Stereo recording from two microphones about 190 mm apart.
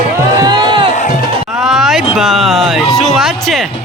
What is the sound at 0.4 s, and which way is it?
Music, 20° right (ahead or behind).